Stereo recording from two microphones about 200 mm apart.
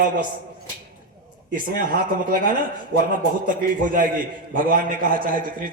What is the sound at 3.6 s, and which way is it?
A man's voice, 45° right (ahead or behind).